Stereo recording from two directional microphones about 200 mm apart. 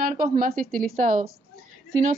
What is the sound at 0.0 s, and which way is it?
Speech, 40° right (ahead or behind).